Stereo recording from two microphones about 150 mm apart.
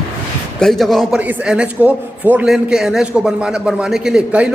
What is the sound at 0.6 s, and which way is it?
Speech, centre (ahead or behind).